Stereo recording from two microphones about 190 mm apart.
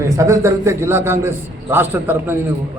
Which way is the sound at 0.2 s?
15° right (ahead or behind).